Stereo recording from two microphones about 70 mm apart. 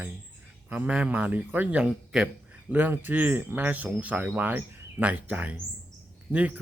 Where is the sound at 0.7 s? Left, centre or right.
Centre.